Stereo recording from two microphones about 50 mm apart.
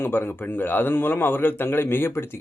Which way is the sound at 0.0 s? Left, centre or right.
Left.